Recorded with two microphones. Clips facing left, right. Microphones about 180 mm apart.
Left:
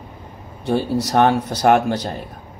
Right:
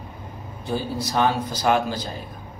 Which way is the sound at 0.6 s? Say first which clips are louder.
Left 7 dB; 70° left (ahead or behind).